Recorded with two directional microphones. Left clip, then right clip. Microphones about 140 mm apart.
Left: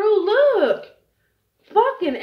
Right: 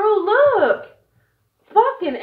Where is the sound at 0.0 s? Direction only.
45° left (ahead or behind).